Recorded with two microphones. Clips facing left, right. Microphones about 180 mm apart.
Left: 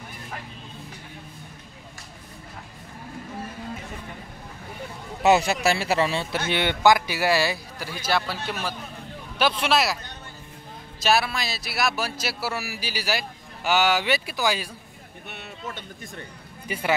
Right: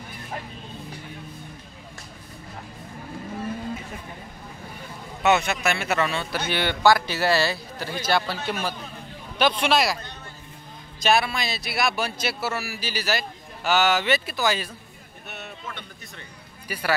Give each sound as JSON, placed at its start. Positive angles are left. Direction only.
{"t": 5.2, "sound": "a man's voice", "side_deg": 35}
{"t": 8.0, "sound": "a man's voice", "side_deg": 0}
{"t": 11.0, "sound": "a man's voice", "side_deg": 5}
{"t": 16.6, "sound": "speech", "side_deg": 20}